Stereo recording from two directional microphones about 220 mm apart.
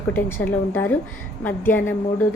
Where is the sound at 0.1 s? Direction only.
10° left (ahead or behind).